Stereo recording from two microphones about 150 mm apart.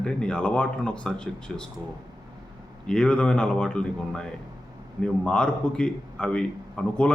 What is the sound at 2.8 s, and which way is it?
Speech, 5° left (ahead or behind).